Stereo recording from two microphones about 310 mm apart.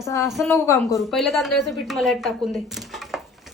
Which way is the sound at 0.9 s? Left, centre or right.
Centre.